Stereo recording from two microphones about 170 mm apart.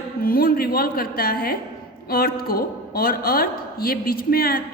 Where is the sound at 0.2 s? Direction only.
60° left (ahead or behind).